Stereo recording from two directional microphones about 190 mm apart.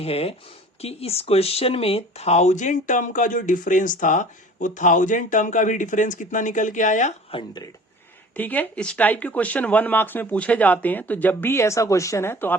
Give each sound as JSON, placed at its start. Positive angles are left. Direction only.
{"t": 0.0, "sound": "speech", "side_deg": 30}
{"t": 8.4, "sound": "speech", "side_deg": 10}